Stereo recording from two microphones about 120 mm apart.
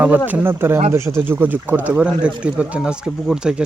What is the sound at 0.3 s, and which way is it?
A man's voice, 15° right (ahead or behind).